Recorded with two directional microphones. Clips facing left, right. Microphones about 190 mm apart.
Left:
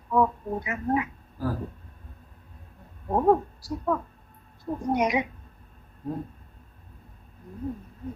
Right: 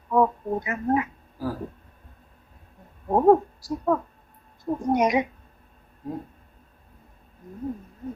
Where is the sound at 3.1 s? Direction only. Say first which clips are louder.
Right 4 dB; 45° right (ahead or behind).